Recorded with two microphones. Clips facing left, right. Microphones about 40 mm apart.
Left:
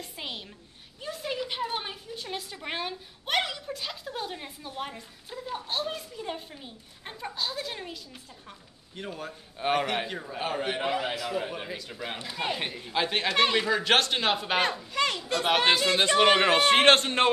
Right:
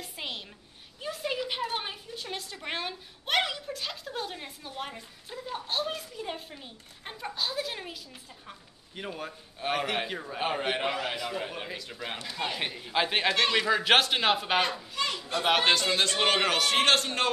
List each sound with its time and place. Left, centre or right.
0.0 s a sound: centre
1.7 s a woman's voice: centre
9.6 s a woman's voice: centre
10.4 s a man's voice: centre
11.1 s a woman's voice: centre
15.0 s a child's voice: left
15.4 s a woman's voice: centre
15.9 s a man's voice: left